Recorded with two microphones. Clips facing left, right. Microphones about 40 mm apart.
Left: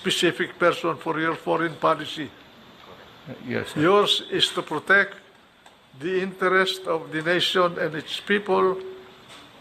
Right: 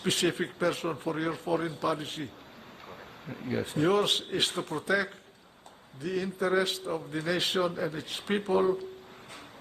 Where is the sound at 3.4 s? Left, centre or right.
Left.